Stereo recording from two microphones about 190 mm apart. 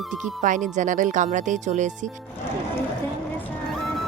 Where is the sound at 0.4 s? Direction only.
40° right (ahead or behind).